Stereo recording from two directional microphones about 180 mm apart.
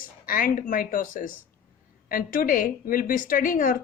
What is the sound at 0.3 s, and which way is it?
A woman's voice, 50° left (ahead or behind).